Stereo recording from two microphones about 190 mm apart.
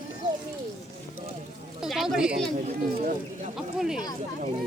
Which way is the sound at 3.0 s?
45° right (ahead or behind).